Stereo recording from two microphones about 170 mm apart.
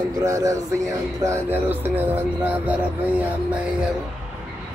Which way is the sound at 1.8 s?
10° right (ahead or behind).